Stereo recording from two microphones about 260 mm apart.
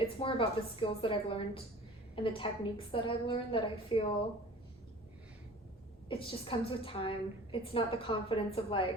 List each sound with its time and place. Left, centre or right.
0.2 s a woman's voice: centre
6.1 s a woman's voice: left